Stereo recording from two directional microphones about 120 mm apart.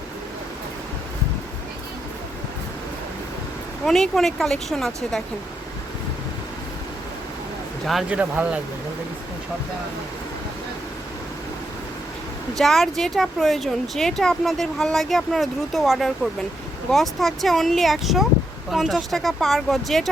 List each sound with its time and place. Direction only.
3.8 s speech: centre (ahead or behind)
8.1 s speech: 10° right (ahead or behind)
12.5 s speech: centre (ahead or behind)